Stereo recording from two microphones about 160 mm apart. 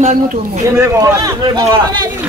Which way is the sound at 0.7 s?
20° right (ahead or behind).